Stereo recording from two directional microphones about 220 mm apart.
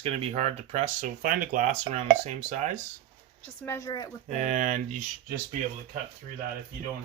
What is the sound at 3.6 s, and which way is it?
Speech, 15° left (ahead or behind).